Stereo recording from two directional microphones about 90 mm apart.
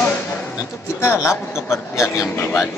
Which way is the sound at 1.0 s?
30° left (ahead or behind).